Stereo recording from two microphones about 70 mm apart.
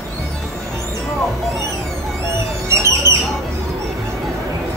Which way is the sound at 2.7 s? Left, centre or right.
Right.